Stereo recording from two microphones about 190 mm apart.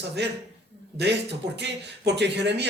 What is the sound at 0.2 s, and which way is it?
Speech, 65° right (ahead or behind).